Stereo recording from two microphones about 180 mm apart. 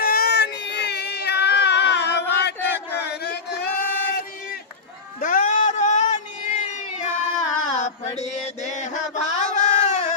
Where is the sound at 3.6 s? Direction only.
10° left (ahead or behind).